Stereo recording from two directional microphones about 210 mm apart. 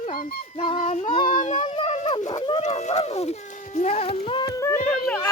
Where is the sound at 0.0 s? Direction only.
40° left (ahead or behind).